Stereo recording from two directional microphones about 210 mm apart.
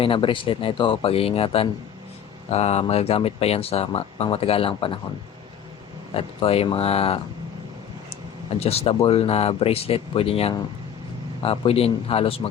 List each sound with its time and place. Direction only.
0.0 s speech: 25° left (ahead or behind)
6.1 s speech: 25° left (ahead or behind)
8.5 s speech: 30° left (ahead or behind)